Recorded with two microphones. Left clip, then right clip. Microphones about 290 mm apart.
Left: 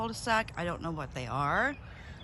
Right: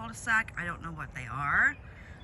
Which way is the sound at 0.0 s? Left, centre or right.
Centre.